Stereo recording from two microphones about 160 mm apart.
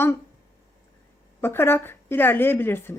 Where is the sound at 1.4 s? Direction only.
15° left (ahead or behind).